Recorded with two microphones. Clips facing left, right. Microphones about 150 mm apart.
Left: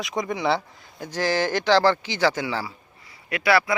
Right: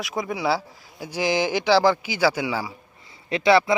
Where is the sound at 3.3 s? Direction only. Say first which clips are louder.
Right 3 dB; 25° right (ahead or behind).